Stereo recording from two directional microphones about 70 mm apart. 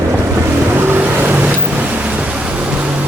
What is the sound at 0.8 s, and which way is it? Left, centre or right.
Vehicle, right.